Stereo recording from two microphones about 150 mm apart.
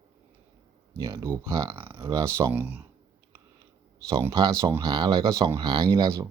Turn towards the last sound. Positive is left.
turn(degrees=-25)  # may be behind; listen again after turning